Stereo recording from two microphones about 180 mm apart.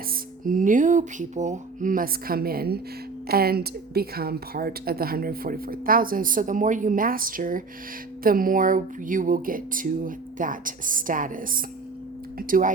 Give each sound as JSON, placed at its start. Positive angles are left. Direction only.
{"t": 0.4, "sound": "speech", "side_deg": -45}